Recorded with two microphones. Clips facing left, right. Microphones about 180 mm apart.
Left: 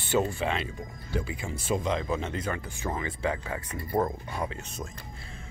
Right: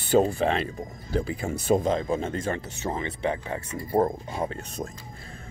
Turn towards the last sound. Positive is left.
turn(degrees=-35)  # may be behind; listen again after turning